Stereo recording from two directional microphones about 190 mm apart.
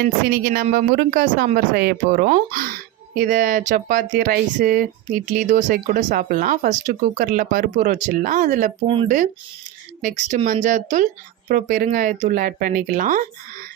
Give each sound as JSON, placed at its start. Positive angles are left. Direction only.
{"t": 0.0, "sound": "speech", "side_deg": -50}